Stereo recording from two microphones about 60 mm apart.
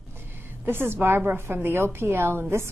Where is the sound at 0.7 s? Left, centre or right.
Right.